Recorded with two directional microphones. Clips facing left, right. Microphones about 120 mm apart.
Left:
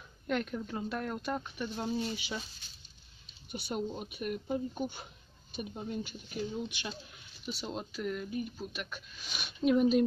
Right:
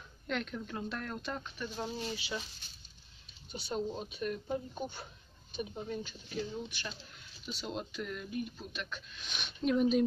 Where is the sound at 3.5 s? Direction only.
10° left (ahead or behind).